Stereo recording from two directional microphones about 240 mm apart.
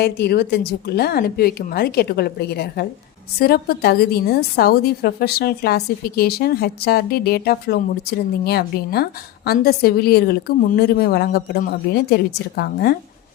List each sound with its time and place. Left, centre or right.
0.0 s a woman's voice: left